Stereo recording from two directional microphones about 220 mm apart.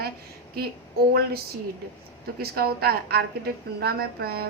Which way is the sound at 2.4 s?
45° right (ahead or behind).